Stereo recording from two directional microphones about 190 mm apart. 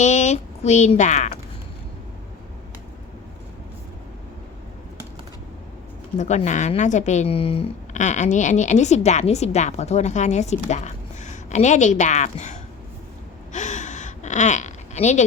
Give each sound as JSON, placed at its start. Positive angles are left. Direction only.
{"t": 0.0, "sound": "speech", "side_deg": 40}
{"t": 6.1, "sound": "speech", "side_deg": 40}
{"t": 13.5, "sound": "gasp", "side_deg": 40}